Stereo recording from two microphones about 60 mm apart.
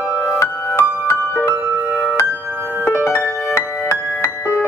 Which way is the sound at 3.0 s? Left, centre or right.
Left.